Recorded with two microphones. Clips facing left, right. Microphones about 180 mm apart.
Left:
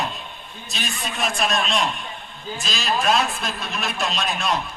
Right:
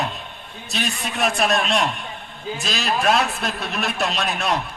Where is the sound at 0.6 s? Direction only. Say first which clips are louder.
Right 4 dB; 60° right (ahead or behind).